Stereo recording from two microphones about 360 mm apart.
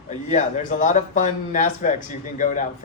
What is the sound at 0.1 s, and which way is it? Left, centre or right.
A man's voice, centre.